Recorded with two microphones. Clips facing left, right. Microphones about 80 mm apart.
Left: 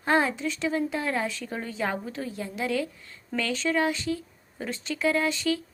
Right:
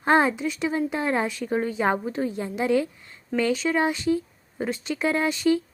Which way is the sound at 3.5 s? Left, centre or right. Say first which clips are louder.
Right 3 dB; centre.